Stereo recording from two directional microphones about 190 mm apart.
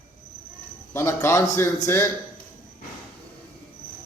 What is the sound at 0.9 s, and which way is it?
Speech, 15° left (ahead or behind).